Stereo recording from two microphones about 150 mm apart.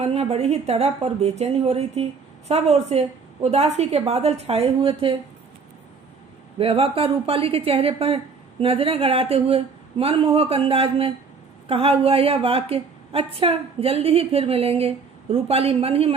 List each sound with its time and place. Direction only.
0.0 s a woman's voice: 45° right (ahead or behind)
6.6 s a woman's voice: 40° right (ahead or behind)